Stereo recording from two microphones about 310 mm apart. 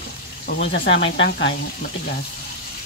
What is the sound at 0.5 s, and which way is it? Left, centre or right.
Speech, left.